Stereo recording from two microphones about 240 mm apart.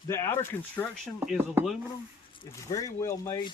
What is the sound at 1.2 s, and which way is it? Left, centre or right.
Speech, centre.